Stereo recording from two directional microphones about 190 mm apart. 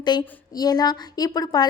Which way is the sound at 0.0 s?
20° left (ahead or behind).